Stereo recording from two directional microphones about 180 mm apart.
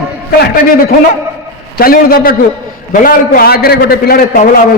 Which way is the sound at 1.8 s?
55° left (ahead or behind).